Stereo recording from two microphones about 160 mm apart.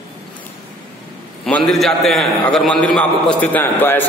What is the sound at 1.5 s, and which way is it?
A man's voice, 5° left (ahead or behind).